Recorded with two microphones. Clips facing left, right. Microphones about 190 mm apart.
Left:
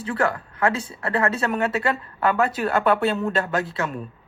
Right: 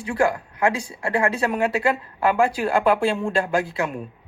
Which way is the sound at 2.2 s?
30° right (ahead or behind).